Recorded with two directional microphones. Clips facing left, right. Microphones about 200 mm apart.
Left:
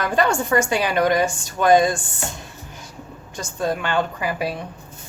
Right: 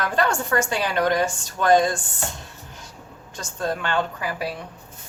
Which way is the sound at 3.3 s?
10° left (ahead or behind).